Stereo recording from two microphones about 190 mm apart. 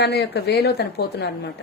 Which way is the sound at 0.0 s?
60° left (ahead or behind).